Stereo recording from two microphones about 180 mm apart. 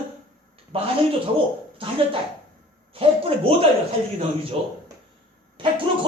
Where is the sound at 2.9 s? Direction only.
30° right (ahead or behind).